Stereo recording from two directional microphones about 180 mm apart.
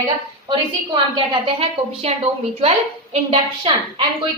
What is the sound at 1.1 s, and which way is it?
A woman's voice, 25° right (ahead or behind).